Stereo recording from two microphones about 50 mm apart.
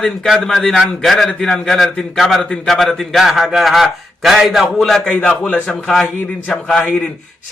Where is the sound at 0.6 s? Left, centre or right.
Centre.